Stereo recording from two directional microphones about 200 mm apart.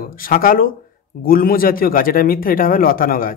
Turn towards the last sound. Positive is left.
turn(degrees=45)  # may be behind; listen again after turning